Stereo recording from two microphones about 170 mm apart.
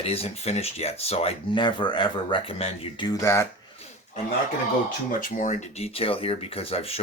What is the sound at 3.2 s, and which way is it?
Speech, 15° left (ahead or behind).